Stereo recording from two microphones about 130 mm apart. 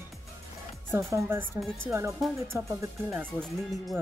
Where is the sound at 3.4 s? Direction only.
Centre (ahead or behind).